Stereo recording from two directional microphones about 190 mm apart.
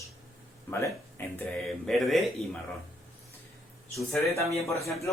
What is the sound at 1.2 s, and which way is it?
Speech, 10° left (ahead or behind).